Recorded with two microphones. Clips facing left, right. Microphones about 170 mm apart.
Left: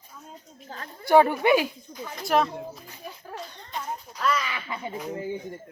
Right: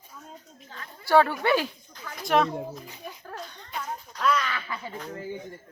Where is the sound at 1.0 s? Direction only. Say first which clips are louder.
Left 3 dB; 15° left (ahead or behind).